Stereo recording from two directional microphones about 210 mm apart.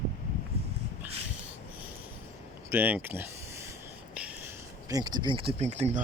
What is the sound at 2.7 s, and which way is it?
Speech, 10° right (ahead or behind).